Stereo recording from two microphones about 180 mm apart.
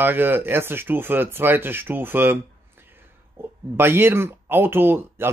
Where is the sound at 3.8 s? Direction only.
10° right (ahead or behind).